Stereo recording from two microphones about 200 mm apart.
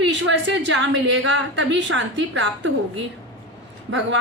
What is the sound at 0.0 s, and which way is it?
A woman's voice, 65° right (ahead or behind).